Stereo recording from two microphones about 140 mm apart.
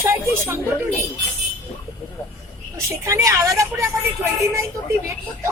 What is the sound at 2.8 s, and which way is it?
Speech, 25° right (ahead or behind).